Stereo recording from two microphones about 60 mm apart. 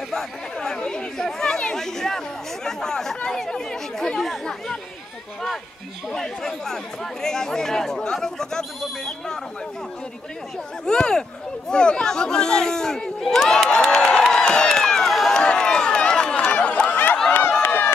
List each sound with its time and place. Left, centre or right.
0.1 s speech: centre
6.1 s speech: centre
10.9 s speech: centre
15.3 s run: centre
17.6 s run: left